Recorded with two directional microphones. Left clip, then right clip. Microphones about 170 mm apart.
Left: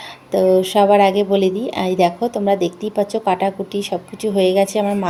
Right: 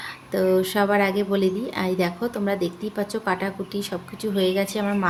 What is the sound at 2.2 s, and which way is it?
Speech, 10° left (ahead or behind).